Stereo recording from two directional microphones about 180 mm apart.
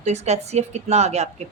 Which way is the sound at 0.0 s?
40° right (ahead or behind).